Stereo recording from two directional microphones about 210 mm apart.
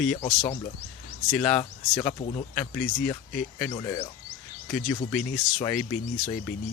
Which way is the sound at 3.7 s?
20° left (ahead or behind).